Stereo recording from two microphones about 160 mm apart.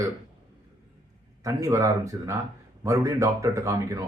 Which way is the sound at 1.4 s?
20° right (ahead or behind).